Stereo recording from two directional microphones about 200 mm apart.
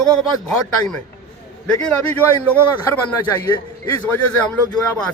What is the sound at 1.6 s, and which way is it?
A man's voice, 5° left (ahead or behind).